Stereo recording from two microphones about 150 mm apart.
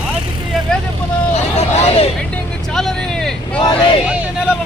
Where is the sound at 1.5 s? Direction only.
45° left (ahead or behind).